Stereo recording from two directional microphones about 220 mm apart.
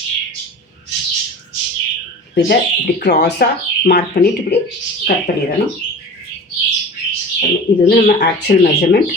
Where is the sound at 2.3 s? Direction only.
45° left (ahead or behind).